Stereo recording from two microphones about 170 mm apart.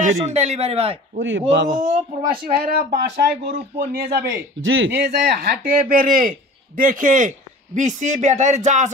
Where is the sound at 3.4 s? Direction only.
65° right (ahead or behind).